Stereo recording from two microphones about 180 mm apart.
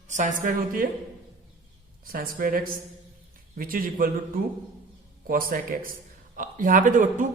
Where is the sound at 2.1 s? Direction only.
55° right (ahead or behind).